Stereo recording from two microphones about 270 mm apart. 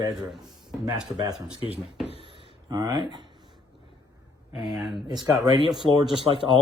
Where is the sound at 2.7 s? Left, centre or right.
Centre.